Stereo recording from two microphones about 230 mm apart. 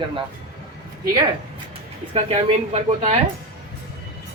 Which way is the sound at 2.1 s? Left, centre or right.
Right.